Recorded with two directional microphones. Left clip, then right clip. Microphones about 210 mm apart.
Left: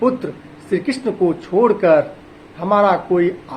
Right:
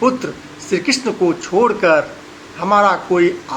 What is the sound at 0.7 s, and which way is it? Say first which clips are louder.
Speech: right 3 dB; 25° right (ahead or behind).